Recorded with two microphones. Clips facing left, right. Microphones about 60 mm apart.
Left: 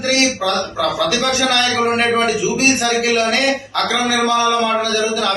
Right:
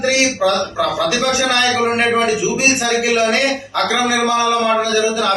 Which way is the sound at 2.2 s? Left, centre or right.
Centre.